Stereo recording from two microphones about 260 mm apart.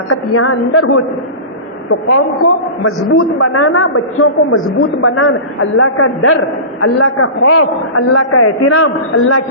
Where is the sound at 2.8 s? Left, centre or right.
Left.